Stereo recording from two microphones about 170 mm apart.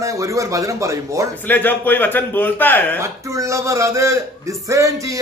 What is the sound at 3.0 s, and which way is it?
A man's voice, 15° right (ahead or behind).